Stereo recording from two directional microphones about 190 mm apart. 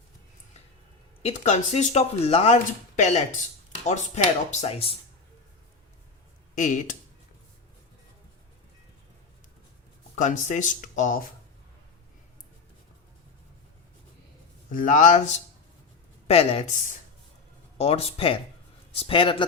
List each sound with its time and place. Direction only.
1.2 s speech: 35° left (ahead or behind)
6.6 s speech: 40° left (ahead or behind)
10.2 s speech: 40° left (ahead or behind)
14.7 s speech: 45° left (ahead or behind)
16.2 s speech: 30° left (ahead or behind)
17.7 s a man's voice: 30° left (ahead or behind)